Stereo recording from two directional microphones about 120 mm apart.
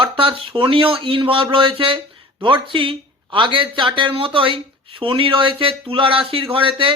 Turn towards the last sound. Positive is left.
turn(degrees=-45)  # may be behind; listen again after turning